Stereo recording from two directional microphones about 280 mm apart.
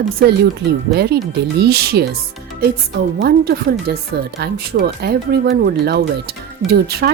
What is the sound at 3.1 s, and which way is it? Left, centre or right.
Speech, right.